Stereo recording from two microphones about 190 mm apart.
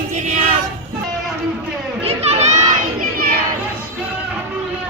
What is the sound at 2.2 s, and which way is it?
Crowd, 35° right (ahead or behind).